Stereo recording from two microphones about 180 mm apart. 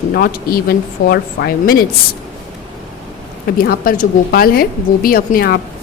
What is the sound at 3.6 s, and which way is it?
A woman's voice, 55° left (ahead or behind).